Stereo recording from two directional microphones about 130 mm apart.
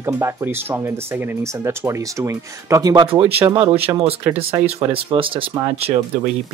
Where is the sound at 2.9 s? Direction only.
40° right (ahead or behind).